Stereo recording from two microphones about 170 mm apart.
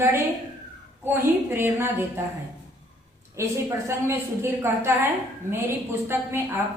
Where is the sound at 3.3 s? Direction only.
15° right (ahead or behind).